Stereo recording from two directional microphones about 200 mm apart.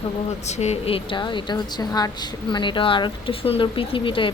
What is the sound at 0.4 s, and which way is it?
A woman's voice, 35° left (ahead or behind).